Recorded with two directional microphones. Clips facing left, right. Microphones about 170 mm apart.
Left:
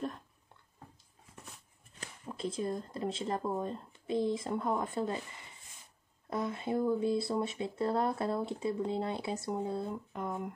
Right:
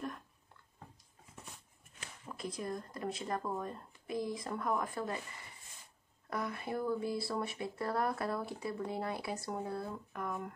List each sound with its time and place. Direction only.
2.0 s speech: 30° left (ahead or behind)
6.3 s speech: 20° left (ahead or behind)